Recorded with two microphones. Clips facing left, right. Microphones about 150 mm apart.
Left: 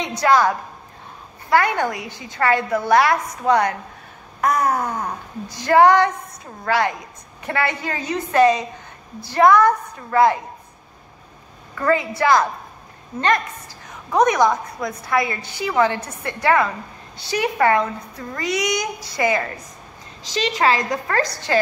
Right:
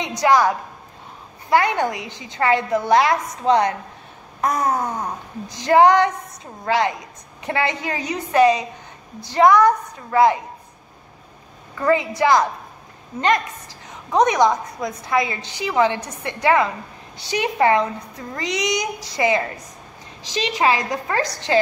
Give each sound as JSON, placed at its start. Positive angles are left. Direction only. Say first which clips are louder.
{"t": 0.0, "sound": "a woman's voice", "louder": "even", "side_deg": -15}
{"t": 11.8, "sound": "a woman's voice", "louder": "right 1 dB", "side_deg": -20}
{"t": 14.1, "sound": "a woman's voice", "louder": "even", "side_deg": -20}
{"t": 20.5, "sound": "a woman's voice", "louder": "even", "side_deg": -15}